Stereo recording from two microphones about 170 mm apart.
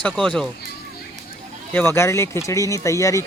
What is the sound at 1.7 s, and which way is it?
Speech, 15° left (ahead or behind).